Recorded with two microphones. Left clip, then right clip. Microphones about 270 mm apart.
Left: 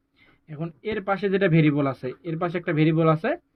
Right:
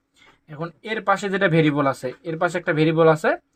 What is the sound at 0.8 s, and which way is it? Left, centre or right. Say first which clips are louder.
Speech: right 3 dB; centre.